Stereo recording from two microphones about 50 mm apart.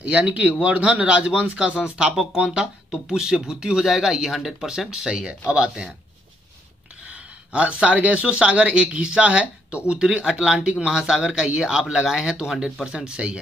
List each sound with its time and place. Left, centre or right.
0.0 s a man's voice: right
7.1 s speech: right
12.9 s a man's voice: right